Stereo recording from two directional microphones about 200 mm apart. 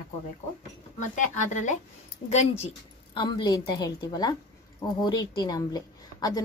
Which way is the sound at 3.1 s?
20° left (ahead or behind).